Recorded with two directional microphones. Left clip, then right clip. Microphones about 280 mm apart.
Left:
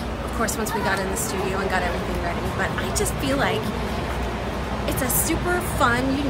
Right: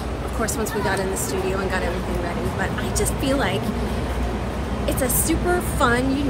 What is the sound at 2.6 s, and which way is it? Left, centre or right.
Speech, centre.